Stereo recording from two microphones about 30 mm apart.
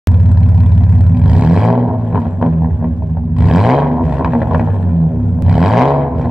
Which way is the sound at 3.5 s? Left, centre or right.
Centre.